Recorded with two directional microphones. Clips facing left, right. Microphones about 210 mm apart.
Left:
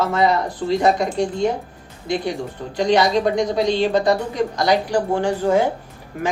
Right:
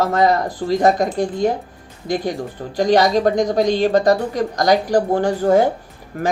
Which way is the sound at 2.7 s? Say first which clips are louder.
Right 2 dB; 45° right (ahead or behind).